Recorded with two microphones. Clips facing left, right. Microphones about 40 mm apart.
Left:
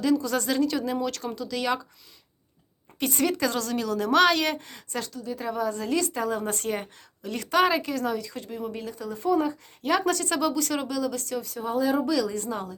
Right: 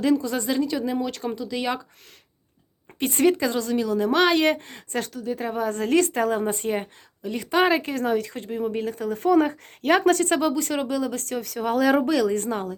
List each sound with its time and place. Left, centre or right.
0.0 s speech: right
0.3 s a woman's voice: centre
3.0 s speech: right
3.4 s a woman's voice: centre
4.4 s speech: right
5.6 s speech: right
6.4 s a woman's voice: centre
7.7 s speech: right
11.4 s speech: right
11.9 s speech: right